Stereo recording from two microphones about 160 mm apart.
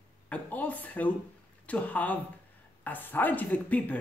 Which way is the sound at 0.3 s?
10° left (ahead or behind).